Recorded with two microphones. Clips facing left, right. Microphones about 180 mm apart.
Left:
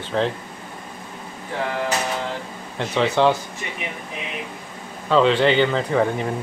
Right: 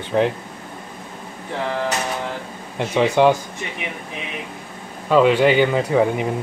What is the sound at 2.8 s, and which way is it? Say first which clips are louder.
Speech: right 3 dB; 15° right (ahead or behind).